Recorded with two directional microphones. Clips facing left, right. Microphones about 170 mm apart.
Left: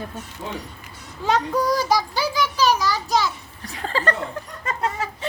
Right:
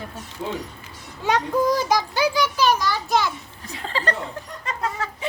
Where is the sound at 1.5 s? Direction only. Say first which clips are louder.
Right 1 dB; 20° right (ahead or behind).